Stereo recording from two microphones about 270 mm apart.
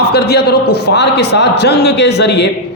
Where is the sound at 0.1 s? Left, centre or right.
Left.